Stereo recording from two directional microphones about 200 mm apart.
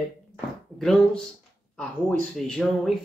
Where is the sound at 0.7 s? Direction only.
Centre (ahead or behind).